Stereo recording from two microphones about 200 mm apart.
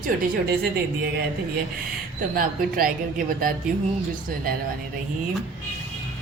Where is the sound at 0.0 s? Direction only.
45° right (ahead or behind).